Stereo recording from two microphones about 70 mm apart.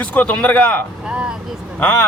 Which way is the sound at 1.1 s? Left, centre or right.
Centre.